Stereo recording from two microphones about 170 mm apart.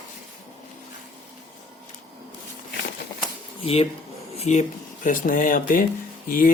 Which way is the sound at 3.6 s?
35° left (ahead or behind).